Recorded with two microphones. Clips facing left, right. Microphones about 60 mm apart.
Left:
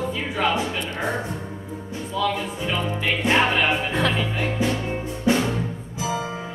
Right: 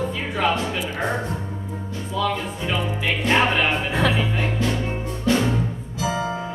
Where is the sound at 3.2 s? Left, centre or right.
Centre.